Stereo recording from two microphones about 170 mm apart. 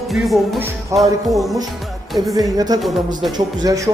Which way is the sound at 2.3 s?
20° right (ahead or behind).